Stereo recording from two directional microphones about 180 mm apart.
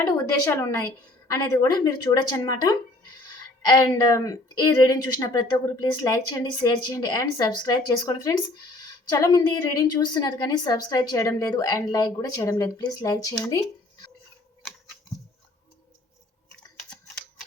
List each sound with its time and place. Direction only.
0.4 s a woman's voice: 15° left (ahead or behind)